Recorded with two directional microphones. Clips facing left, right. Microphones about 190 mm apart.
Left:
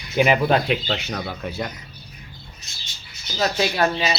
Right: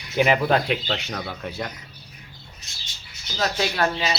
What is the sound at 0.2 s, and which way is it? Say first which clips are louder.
Speech: left 2 dB; 10° left (ahead or behind).